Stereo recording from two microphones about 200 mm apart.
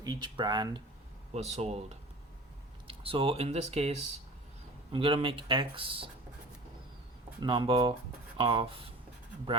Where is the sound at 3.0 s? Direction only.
25° right (ahead or behind).